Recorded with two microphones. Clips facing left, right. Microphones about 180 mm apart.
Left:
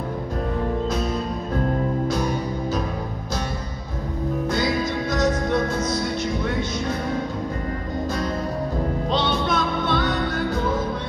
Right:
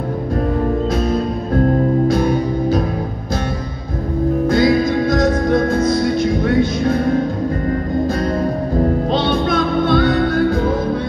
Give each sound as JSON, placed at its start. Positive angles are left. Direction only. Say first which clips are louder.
{"t": 2.0, "sound": "music", "louder": "right 8 dB", "side_deg": -55}
{"t": 4.6, "sound": "music", "louder": "right 11 dB", "side_deg": -55}
{"t": 9.1, "sound": "music", "louder": "right 6 dB", "side_deg": -55}